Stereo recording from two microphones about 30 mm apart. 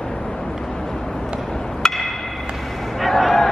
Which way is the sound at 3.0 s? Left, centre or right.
Centre.